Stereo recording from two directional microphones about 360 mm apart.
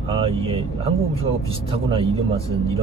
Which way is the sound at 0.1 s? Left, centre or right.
Centre.